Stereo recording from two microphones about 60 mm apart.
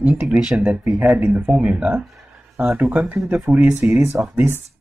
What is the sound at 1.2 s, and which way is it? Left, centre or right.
Speech, right.